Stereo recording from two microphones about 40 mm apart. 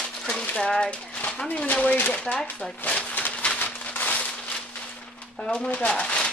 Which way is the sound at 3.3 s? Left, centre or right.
Left.